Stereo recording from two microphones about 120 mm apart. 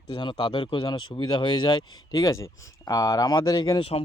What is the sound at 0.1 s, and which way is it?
Speech, 40° left (ahead or behind).